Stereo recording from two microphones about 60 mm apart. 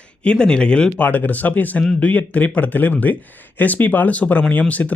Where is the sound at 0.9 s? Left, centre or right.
Left.